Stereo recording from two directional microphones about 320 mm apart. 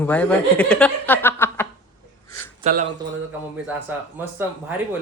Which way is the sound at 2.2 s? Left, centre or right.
Centre.